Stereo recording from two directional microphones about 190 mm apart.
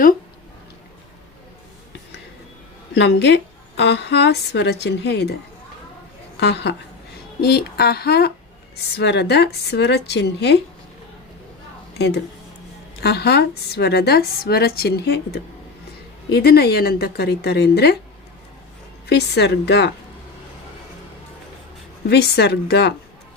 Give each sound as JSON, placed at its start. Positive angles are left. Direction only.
{"t": 2.9, "sound": "a woman's voice", "side_deg": 65}
{"t": 6.4, "sound": "a woman's voice", "side_deg": 65}
{"t": 11.9, "sound": "a woman's voice", "side_deg": 60}
{"t": 19.0, "sound": "a woman's voice", "side_deg": 60}
{"t": 22.1, "sound": "a woman's voice", "side_deg": 60}